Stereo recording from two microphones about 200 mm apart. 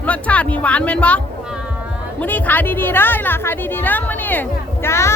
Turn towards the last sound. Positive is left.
turn(degrees=15)  # may be behind; listen again after turning